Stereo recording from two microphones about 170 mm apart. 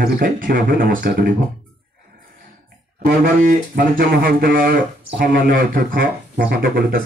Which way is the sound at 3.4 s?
55° right (ahead or behind).